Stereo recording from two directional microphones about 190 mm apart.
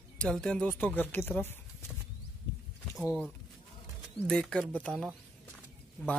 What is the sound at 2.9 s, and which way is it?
Speech, 10° left (ahead or behind).